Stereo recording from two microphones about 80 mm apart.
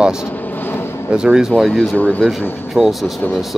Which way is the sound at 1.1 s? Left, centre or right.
Centre.